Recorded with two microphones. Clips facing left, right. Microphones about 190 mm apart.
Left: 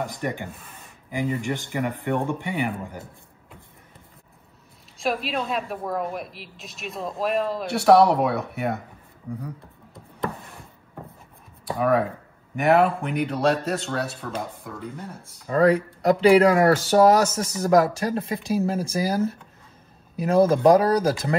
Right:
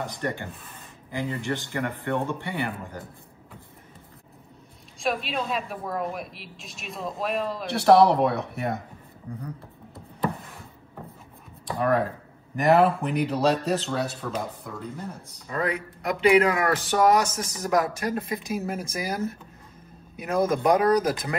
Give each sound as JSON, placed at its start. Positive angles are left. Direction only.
{"t": 0.2, "sound": "a man's voice", "side_deg": 15}
{"t": 4.9, "sound": "speech", "side_deg": 0}
{"t": 11.6, "sound": "speech", "side_deg": 0}
{"t": 15.5, "sound": "speech", "side_deg": 35}